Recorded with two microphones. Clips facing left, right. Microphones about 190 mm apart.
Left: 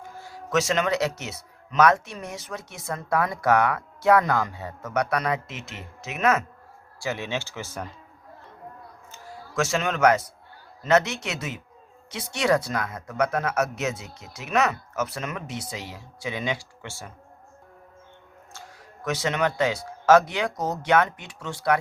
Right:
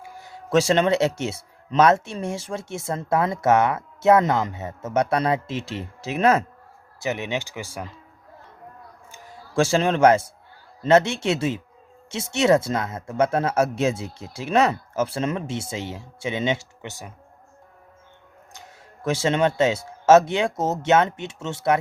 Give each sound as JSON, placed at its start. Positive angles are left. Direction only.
{"t": 0.3, "sound": "speech", "side_deg": -30}
{"t": 7.0, "sound": "speech", "side_deg": -20}
{"t": 9.6, "sound": "a man's voice", "side_deg": -30}
{"t": 18.5, "sound": "speech", "side_deg": -25}